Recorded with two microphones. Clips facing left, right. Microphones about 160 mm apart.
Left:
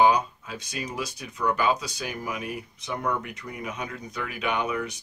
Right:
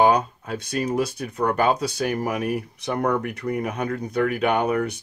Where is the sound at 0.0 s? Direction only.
55° right (ahead or behind).